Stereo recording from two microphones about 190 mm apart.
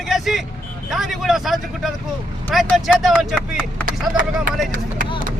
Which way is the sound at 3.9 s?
50° right (ahead or behind).